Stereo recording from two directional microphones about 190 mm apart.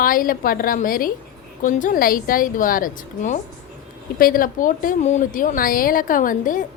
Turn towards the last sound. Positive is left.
turn(degrees=45)  # may be behind; listen again after turning